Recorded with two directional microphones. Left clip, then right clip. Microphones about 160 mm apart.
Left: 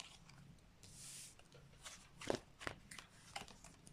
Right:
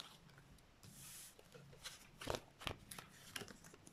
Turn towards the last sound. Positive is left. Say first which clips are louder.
# right 1 dB
turn(degrees=-20)  # may be behind; listen again after turning